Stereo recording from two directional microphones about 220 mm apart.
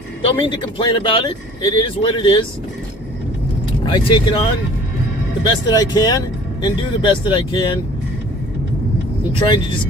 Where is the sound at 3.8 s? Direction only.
20° left (ahead or behind).